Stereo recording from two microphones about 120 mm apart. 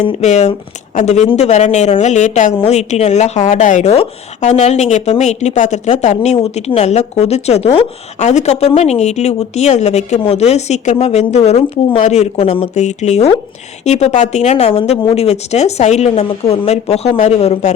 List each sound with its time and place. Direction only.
0.2 s speech: 70° left (ahead or behind)
2.6 s speech: 65° left (ahead or behind)
8.2 s speech: 70° left (ahead or behind)